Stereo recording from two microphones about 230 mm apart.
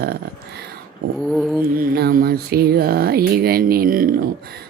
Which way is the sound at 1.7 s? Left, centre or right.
Right.